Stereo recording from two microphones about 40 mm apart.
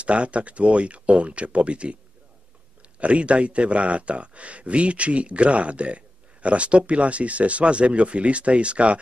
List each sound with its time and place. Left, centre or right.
0.0 s speech: right
3.0 s speech: right